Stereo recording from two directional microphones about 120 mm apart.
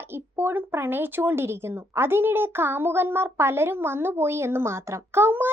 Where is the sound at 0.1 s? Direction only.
20° right (ahead or behind).